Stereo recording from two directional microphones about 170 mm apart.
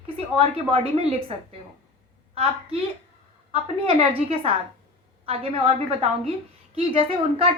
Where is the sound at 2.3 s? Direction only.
35° right (ahead or behind).